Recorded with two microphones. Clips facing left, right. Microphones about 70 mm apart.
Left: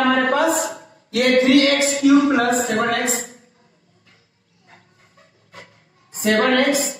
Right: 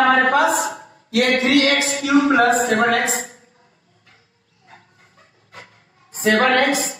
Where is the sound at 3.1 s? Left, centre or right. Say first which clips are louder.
Right 1 dB; right.